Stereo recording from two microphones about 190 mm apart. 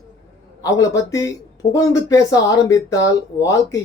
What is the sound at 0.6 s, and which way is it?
Speech, 15° left (ahead or behind).